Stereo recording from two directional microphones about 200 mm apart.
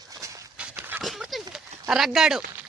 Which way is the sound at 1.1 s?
Centre (ahead or behind).